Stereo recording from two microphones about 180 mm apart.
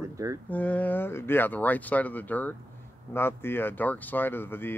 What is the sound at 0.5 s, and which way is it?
A man's voice, 10° left (ahead or behind).